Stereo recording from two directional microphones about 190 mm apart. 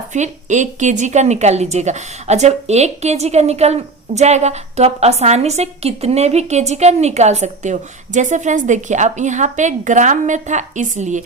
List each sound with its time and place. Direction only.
0.1 s a woman's voice: 40° right (ahead or behind)